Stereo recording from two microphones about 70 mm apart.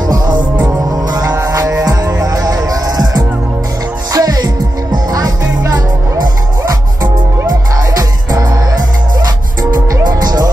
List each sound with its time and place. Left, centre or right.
1.3 s music: right
6.6 s music: right
10.0 s music: right